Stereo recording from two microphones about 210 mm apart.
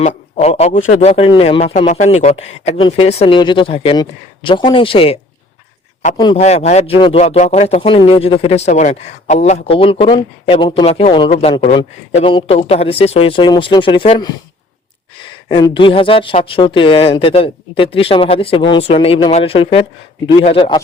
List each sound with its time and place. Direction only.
0.0 s speech: 30° left (ahead or behind)
6.4 s speech: 30° left (ahead or behind)
15.4 s speech: 25° left (ahead or behind)